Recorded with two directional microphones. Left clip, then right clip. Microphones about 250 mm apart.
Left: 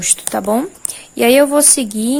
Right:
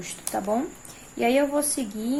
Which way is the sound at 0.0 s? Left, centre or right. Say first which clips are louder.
Left 11 dB; left.